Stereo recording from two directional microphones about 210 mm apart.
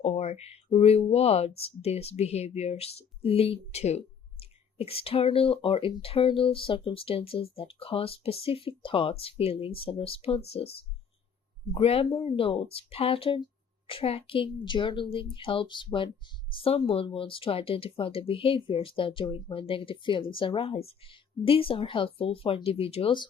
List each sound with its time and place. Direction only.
0.0 s speech: 30° left (ahead or behind)